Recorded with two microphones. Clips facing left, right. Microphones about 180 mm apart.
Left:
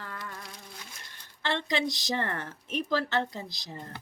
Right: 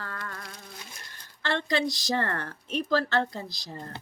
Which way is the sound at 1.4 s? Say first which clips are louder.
Right 2 dB; 20° left (ahead or behind).